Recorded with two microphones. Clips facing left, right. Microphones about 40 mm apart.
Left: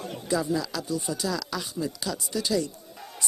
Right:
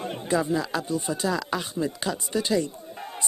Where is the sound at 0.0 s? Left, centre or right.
Right.